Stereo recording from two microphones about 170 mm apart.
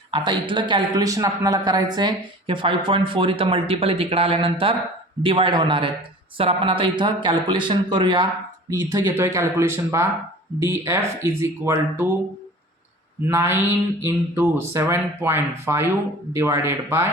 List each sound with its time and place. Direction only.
0.1 s a man's voice: 30° right (ahead or behind)
13.2 s speech: 15° right (ahead or behind)